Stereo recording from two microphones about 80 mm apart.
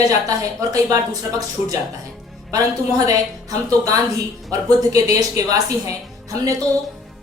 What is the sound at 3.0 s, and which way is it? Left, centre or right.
Speech, right.